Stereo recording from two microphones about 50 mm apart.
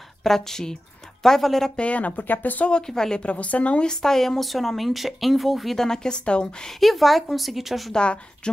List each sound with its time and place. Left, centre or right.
0.2 s a woman's voice: centre
1.8 s speech: left
2.7 s a woman's voice: centre
3.9 s speech: centre
5.9 s a woman's voice: centre
6.7 s speech: centre
7.9 s a woman's voice: left